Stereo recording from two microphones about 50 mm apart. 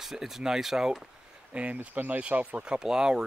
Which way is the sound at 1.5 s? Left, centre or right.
Right.